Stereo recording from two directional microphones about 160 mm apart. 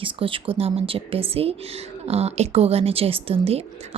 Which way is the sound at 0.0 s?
35° right (ahead or behind).